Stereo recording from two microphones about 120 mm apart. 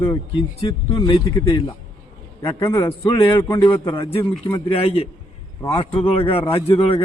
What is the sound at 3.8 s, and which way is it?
A man's voice, 45° left (ahead or behind).